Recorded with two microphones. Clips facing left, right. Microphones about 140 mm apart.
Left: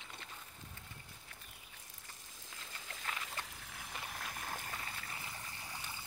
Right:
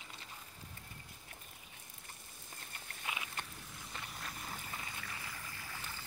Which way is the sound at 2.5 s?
90° left.